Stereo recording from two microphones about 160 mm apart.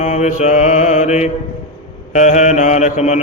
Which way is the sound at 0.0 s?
45° left (ahead or behind).